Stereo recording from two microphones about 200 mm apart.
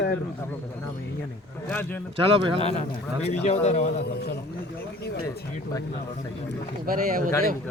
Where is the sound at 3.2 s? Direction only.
30° left (ahead or behind).